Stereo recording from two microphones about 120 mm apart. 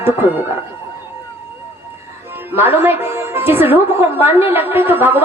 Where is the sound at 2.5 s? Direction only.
20° right (ahead or behind).